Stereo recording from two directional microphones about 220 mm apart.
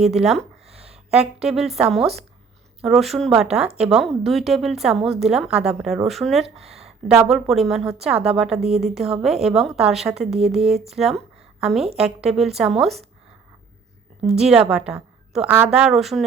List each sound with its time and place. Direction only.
0.2 s a woman's voice: centre (ahead or behind)
0.6 s a sound: 30° right (ahead or behind)
1.4 s a woman's voice: centre (ahead or behind)
8.6 s speech: 30° right (ahead or behind)
9.2 s a woman's voice: centre (ahead or behind)
10.2 s speech: 30° right (ahead or behind)
10.8 s a woman's voice: centre (ahead or behind)
14.3 s a woman's voice: 5° right (ahead or behind)